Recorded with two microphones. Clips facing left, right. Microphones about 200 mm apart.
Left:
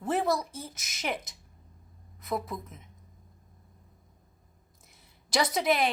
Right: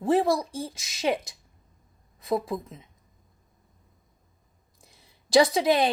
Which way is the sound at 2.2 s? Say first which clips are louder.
Right 6 dB; 30° right (ahead or behind).